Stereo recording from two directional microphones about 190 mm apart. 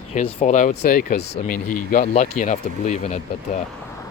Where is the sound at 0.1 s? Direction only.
35° left (ahead or behind).